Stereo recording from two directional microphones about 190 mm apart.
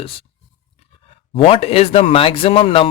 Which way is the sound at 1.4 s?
30° left (ahead or behind).